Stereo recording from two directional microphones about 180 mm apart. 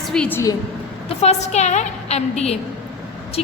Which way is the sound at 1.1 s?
35° left (ahead or behind).